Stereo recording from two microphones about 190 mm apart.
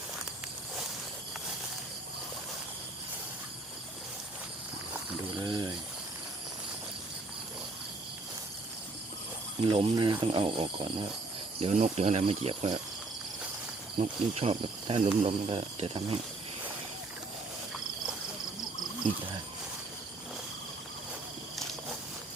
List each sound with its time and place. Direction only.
5.4 s a sound: 20° right (ahead or behind)
9.6 s speech: 25° right (ahead or behind)
14.0 s speech: 35° right (ahead or behind)